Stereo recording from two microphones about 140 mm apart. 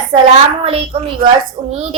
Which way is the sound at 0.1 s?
40° right (ahead or behind).